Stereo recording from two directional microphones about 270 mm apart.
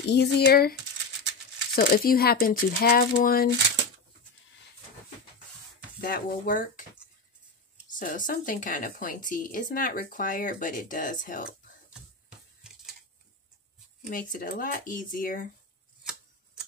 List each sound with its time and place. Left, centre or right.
0.0 s speech: left
1.8 s speech: left
5.9 s speech: left
8.0 s a woman's voice: left
14.1 s a woman's voice: left